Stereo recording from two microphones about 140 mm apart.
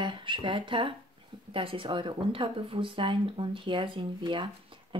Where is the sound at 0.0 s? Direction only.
35° right (ahead or behind).